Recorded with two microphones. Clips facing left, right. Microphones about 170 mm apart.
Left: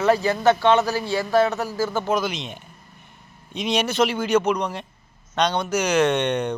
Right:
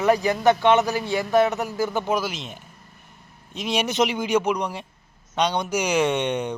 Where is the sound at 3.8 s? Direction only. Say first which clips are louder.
Right 1 dB; 15° right (ahead or behind).